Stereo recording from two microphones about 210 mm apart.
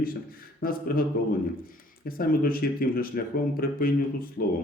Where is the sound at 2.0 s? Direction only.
45° left (ahead or behind).